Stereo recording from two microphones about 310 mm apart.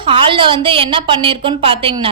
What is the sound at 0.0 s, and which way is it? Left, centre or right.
Speech, centre.